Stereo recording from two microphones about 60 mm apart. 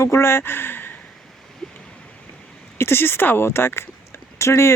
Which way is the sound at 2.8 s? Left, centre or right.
Left.